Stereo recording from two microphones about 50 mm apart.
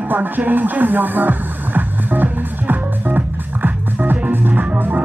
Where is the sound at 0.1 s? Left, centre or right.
Right.